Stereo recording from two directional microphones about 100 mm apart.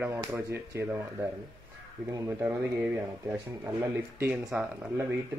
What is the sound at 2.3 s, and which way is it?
Speech, 20° right (ahead or behind).